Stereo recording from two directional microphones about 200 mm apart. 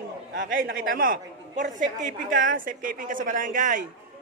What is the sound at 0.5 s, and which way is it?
A woman's voice, 45° right (ahead or behind).